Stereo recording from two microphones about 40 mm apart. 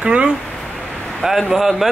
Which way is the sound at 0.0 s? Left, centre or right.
Right.